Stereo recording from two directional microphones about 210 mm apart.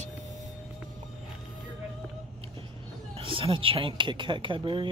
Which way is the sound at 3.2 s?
25° right (ahead or behind).